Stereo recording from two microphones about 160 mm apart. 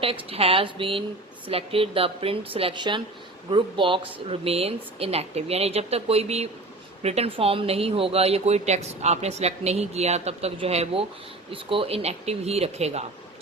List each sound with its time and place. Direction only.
0.0 s speech: 35° right (ahead or behind)